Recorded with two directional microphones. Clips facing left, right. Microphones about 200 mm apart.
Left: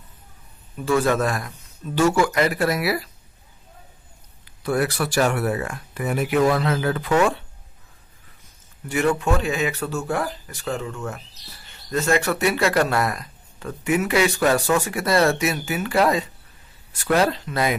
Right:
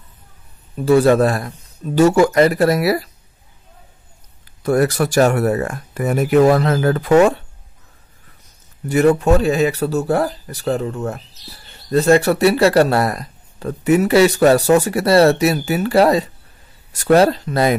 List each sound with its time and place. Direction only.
0.7 s speech: 35° right (ahead or behind)
4.6 s speech: 45° right (ahead or behind)
8.8 s speech: 40° right (ahead or behind)